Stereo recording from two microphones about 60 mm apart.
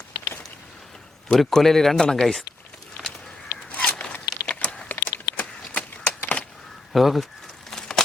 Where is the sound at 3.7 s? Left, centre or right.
Left.